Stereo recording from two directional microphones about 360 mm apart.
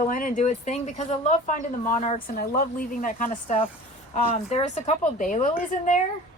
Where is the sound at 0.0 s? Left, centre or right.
Left.